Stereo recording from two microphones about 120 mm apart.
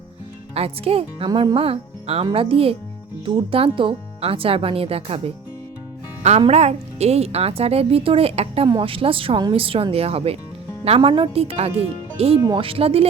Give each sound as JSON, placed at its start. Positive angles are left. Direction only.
{"t": 0.5, "sound": "speech", "side_deg": -55}
{"t": 1.3, "sound": "speech", "side_deg": -35}
{"t": 1.5, "sound": "speech", "side_deg": -55}
{"t": 6.5, "sound": "speech", "side_deg": -65}